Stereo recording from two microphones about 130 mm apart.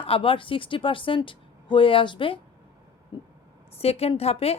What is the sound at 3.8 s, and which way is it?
Speech, 50° left (ahead or behind).